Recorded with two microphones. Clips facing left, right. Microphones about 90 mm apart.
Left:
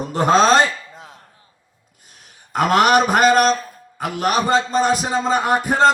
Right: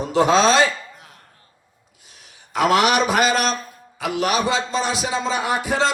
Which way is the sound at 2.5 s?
45° left (ahead or behind).